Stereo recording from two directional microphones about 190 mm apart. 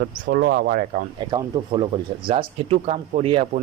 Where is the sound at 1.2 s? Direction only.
25° right (ahead or behind).